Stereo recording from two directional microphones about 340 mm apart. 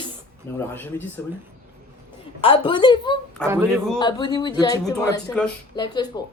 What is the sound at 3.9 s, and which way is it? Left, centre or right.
Speech, centre.